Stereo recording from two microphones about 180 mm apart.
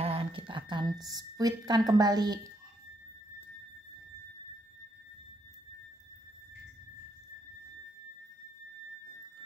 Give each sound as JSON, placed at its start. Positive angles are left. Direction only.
{"t": 0.0, "sound": "a woman's voice", "side_deg": -30}